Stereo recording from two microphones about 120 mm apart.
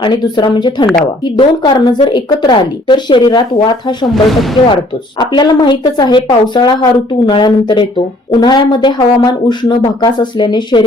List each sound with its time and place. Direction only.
0.0 s a woman's voice: 40° left (ahead or behind)
4.1 s speech: centre (ahead or behind)
5.3 s a woman's voice: 40° left (ahead or behind)